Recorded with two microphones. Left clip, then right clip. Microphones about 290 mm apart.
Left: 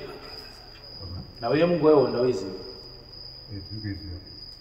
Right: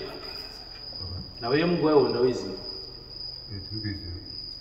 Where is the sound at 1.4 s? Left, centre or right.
Left.